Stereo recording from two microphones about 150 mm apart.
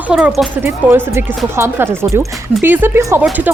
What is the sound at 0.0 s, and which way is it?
Speech, 5° right (ahead or behind).